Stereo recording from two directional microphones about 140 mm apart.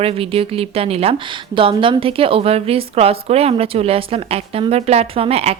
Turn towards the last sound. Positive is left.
turn(degrees=-45)  # may be behind; listen again after turning